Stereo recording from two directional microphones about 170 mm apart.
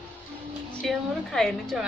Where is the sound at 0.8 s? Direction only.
5° left (ahead or behind).